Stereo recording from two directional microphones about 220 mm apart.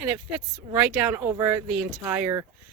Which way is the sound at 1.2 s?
15° right (ahead or behind).